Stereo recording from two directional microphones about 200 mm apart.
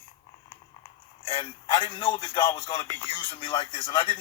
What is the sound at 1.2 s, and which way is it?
Speech, 25° left (ahead or behind).